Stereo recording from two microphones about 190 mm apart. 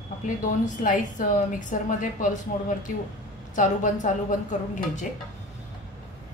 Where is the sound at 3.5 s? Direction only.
40° left (ahead or behind).